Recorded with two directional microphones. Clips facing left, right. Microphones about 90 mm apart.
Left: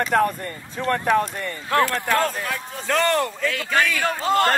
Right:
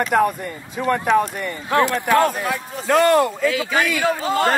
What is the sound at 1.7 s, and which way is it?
Speech, 20° right (ahead or behind).